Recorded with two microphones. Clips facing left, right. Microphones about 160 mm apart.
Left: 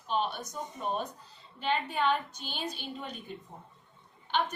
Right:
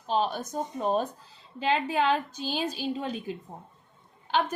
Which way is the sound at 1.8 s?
90° right.